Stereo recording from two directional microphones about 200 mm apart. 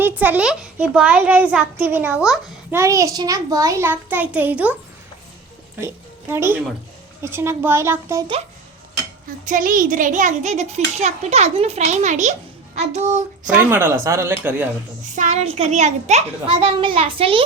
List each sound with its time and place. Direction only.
0.0 s a child's voice: 10° right (ahead or behind)
2.7 s a child's voice: 15° right (ahead or behind)
5.8 s a woman's voice: 10° right (ahead or behind)
9.5 s a child's voice: 45° right (ahead or behind)
13.7 s a child's voice: 10° right (ahead or behind)
15.1 s a child's voice: 35° right (ahead or behind)